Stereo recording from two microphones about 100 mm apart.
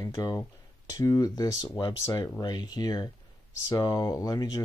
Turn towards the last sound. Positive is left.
turn(degrees=40)  # may be behind; listen again after turning